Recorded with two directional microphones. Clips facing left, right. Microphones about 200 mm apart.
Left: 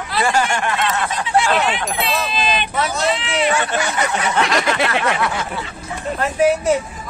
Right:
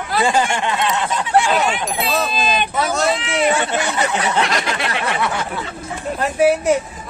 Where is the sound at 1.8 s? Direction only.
Centre (ahead or behind).